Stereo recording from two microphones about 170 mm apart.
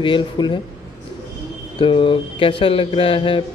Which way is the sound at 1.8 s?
30° left (ahead or behind).